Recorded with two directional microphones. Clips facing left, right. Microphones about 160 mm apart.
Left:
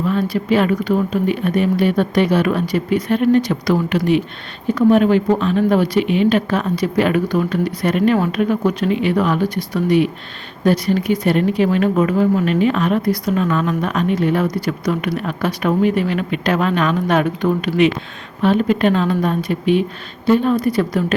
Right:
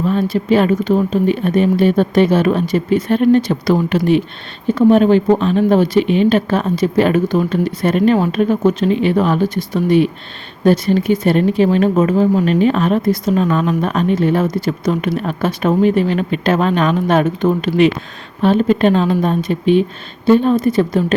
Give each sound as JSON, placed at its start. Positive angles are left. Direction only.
{"t": 0.1, "sound": "speech", "side_deg": -30}